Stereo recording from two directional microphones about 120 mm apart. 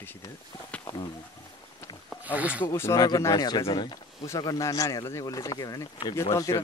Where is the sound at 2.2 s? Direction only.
10° right (ahead or behind).